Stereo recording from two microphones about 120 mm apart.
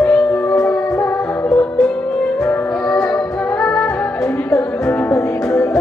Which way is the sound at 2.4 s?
5° left (ahead or behind).